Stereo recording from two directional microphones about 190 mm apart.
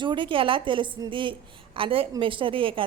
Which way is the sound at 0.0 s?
25° right (ahead or behind).